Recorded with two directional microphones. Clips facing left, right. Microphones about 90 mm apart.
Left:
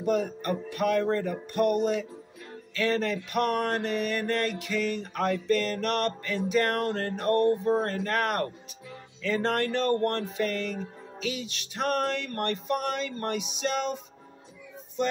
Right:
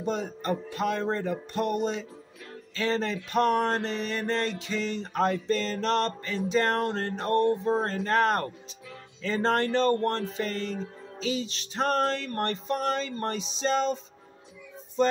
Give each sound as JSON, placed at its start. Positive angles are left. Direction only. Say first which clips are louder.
{"t": 0.0, "sound": "mantra", "louder": "left 3 dB", "side_deg": -25}
{"t": 9.2, "sound": "music", "louder": "right 1 dB", "side_deg": -30}